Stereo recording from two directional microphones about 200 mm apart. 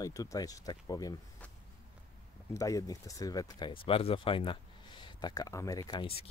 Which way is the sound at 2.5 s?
15° left (ahead or behind).